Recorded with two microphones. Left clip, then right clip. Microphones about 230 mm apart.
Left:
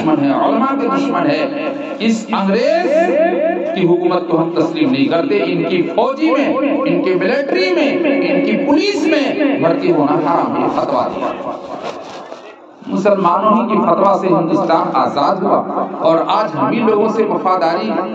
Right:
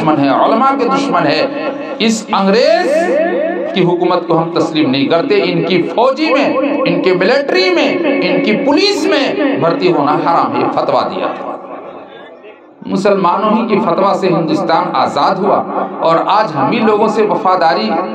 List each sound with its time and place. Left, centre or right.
0.0 s a man's voice: right
4.1 s a man's voice: right
6.5 s speech: centre
6.8 s a man's voice: right
7.9 s speech: centre
8.5 s a man's voice: right
13.0 s a man's voice: right